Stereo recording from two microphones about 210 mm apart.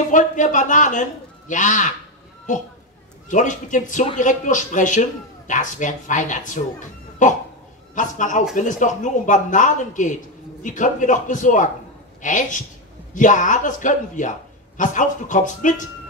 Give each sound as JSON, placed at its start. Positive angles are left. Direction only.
{"t": 0.1, "sound": "speech", "side_deg": 35}
{"t": 3.3, "sound": "speech", "side_deg": 35}